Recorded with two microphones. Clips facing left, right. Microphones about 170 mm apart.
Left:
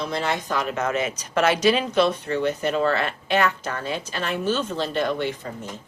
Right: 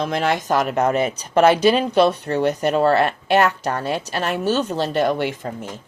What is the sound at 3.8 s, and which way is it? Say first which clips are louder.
Speech: right 5 dB; 70° right (ahead or behind).